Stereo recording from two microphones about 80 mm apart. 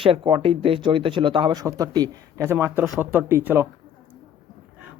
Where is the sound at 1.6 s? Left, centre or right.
Right.